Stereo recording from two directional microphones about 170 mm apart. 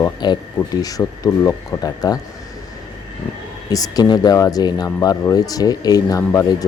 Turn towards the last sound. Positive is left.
turn(degrees=20)  # may be behind; listen again after turning